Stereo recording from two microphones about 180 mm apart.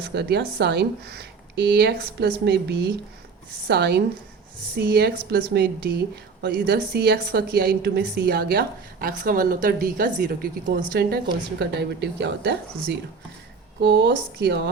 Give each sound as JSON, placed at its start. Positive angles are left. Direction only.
{"t": 0.0, "sound": "a woman's voice", "side_deg": -65}
{"t": 11.6, "sound": "speech", "side_deg": -70}